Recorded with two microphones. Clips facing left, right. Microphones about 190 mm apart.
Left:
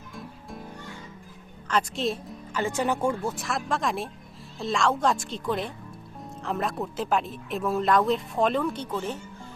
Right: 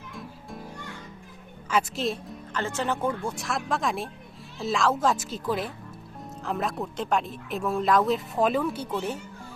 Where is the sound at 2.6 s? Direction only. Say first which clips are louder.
Left 2 dB; 15° left (ahead or behind).